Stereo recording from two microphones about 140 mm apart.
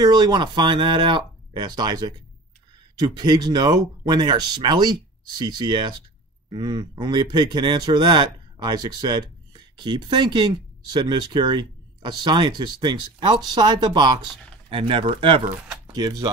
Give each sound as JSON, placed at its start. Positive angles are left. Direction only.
{"t": 0.0, "sound": "a man's voice", "side_deg": -30}